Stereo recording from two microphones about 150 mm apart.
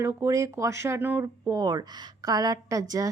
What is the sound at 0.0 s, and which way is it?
Speech, 15° right (ahead or behind).